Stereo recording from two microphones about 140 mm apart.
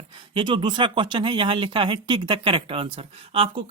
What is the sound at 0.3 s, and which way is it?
Speech, 35° right (ahead or behind).